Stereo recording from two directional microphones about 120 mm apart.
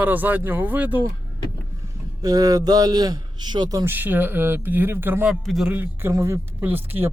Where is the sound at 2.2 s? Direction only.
30° right (ahead or behind).